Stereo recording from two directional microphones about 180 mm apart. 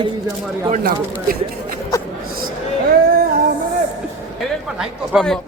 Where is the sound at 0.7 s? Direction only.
55° right (ahead or behind).